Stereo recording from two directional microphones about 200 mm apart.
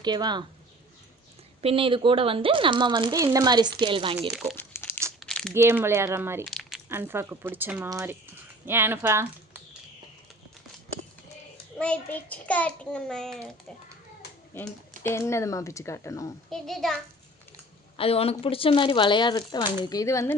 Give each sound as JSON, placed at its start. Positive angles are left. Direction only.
{"t": 0.0, "sound": "speech", "side_deg": -20}
{"t": 1.6, "sound": "speech", "side_deg": -25}
{"t": 4.3, "sound": "a child's voice", "side_deg": -5}
{"t": 4.5, "sound": "crumpling", "side_deg": 10}
{"t": 5.5, "sound": "speech", "side_deg": -10}
{"t": 6.5, "sound": "a sound", "side_deg": 0}
{"t": 6.8, "sound": "speech", "side_deg": -10}
{"t": 11.8, "sound": "a child's voice", "side_deg": 5}
{"t": 14.5, "sound": "speech", "side_deg": 10}
{"t": 16.5, "sound": "a child's voice", "side_deg": 0}
{"t": 17.9, "sound": "speech", "side_deg": 30}